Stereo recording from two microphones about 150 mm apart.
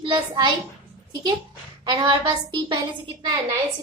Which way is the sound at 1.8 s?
30° right (ahead or behind).